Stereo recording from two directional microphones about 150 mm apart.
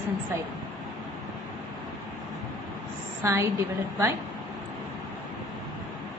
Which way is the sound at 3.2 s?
15° right (ahead or behind).